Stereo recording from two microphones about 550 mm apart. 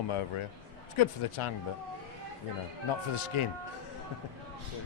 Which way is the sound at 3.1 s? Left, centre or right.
Left.